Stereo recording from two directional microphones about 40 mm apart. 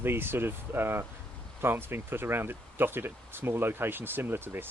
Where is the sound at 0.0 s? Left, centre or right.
Right.